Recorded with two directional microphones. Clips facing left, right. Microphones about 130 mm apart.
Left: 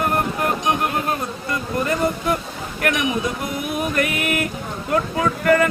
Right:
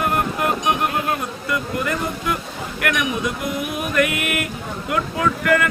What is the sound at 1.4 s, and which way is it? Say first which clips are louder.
Speech: left 1 dB; 35° left (ahead or behind).